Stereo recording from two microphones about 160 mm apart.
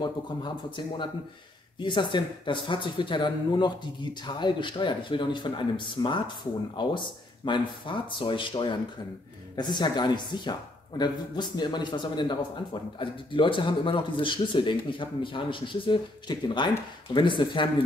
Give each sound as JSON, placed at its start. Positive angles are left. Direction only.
{"t": 0.0, "sound": "speech", "side_deg": 25}
{"t": 7.4, "sound": "speech", "side_deg": 30}